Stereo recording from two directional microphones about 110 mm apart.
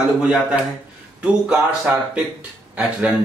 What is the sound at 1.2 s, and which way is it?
A man's voice, 10° right (ahead or behind).